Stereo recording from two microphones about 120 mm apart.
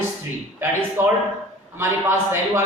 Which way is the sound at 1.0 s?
15° right (ahead or behind).